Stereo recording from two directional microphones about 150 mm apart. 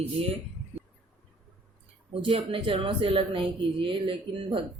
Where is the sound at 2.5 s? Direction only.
35° right (ahead or behind).